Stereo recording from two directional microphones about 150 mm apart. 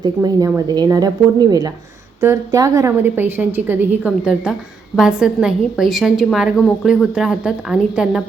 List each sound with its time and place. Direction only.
0.0 s a woman's voice: 25° right (ahead or behind); by 8.2 s 5° right (ahead or behind)